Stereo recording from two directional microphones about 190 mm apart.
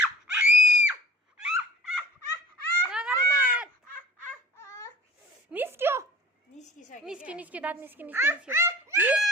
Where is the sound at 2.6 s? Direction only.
10° left (ahead or behind).